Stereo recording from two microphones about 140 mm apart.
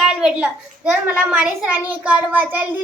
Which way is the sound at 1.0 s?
10° right (ahead or behind).